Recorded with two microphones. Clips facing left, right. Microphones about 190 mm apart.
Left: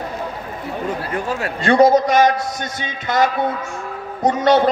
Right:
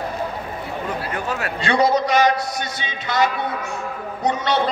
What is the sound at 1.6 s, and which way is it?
A man's voice, 45° left (ahead or behind).